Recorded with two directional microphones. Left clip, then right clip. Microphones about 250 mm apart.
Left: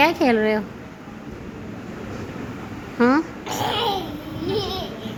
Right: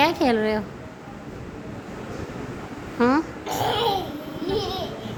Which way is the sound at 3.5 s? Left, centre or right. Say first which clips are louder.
Right 1 dB; centre.